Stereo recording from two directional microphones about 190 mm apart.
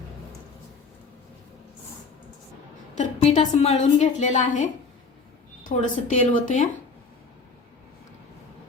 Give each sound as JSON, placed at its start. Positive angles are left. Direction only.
{"t": 3.0, "sound": "a woman's voice", "side_deg": 35}